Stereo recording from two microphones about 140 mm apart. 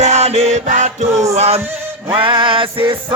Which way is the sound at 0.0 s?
50° right (ahead or behind).